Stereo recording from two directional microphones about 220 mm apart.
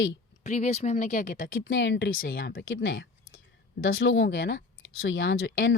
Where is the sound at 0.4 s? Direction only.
30° left (ahead or behind).